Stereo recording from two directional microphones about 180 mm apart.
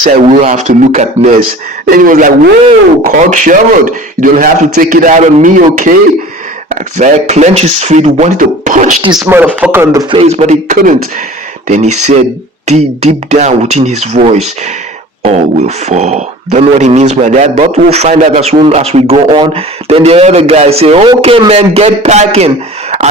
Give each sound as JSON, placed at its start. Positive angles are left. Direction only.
{"t": 0.1, "sound": "speech", "side_deg": -45}
{"t": 9.2, "sound": "speech", "side_deg": -10}
{"t": 10.2, "sound": "speech", "side_deg": -35}